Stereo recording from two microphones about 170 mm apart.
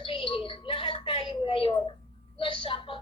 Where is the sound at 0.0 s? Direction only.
30° left (ahead or behind).